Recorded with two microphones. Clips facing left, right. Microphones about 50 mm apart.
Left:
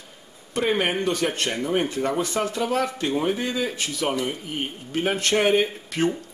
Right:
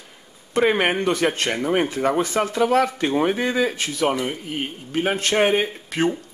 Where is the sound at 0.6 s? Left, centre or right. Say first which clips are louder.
Right 4 dB; right.